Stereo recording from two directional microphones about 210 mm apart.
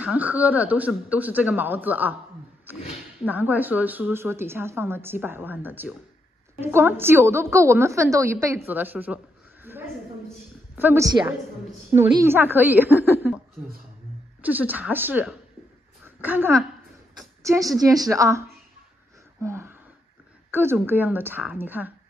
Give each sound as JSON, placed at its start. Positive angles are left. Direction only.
{"t": 0.0, "sound": "a woman's voice", "side_deg": -5}
{"t": 14.4, "sound": "a woman's voice", "side_deg": -10}
{"t": 19.4, "sound": "a woman's voice", "side_deg": -10}